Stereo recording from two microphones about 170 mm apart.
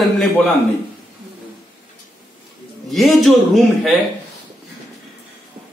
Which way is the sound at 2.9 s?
Centre (ahead or behind).